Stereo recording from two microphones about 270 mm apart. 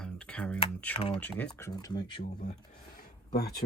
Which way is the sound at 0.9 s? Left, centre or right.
Left.